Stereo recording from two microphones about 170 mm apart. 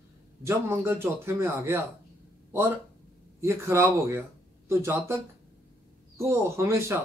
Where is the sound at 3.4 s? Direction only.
15° right (ahead or behind).